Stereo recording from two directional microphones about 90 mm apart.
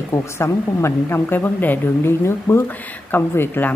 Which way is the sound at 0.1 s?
30° left (ahead or behind).